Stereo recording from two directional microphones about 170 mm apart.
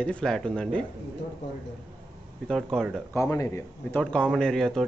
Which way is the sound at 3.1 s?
15° left (ahead or behind).